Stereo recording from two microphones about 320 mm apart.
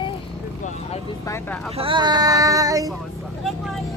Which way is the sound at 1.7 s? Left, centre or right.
Centre.